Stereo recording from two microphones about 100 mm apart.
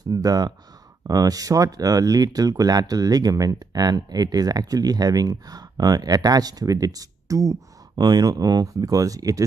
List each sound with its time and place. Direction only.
0.0 s speech: 40° right (ahead or behind)